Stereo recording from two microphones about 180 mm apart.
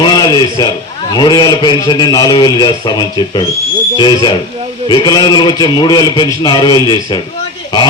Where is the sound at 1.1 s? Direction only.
25° left (ahead or behind).